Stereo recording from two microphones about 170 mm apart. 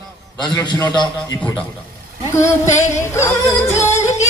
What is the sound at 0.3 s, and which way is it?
A man's voice, 25° left (ahead or behind).